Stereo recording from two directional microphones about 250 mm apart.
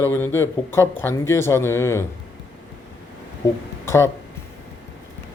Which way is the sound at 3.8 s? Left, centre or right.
Centre.